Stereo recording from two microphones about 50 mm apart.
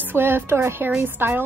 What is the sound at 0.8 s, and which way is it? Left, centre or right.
Speech, right.